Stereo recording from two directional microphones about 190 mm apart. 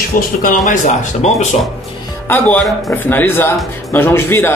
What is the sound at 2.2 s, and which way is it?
Speech, 5° left (ahead or behind).